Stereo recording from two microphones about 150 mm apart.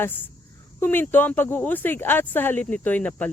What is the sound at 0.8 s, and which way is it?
Speech, 15° left (ahead or behind).